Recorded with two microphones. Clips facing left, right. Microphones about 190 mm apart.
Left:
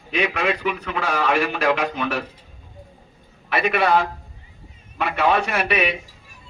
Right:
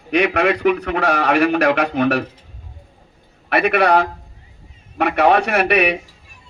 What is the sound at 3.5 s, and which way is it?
A man's voice, 65° right (ahead or behind).